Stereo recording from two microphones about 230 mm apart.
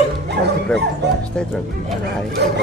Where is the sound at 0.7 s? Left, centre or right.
Centre.